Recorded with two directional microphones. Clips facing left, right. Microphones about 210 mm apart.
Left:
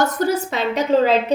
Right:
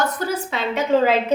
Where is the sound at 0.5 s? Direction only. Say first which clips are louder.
Left 2 dB; 40° left (ahead or behind).